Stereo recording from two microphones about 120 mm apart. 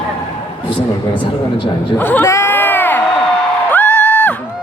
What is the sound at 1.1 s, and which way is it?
Speech, 45° left (ahead or behind).